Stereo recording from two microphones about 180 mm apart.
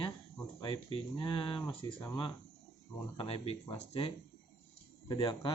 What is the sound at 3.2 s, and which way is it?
Speech, 30° left (ahead or behind).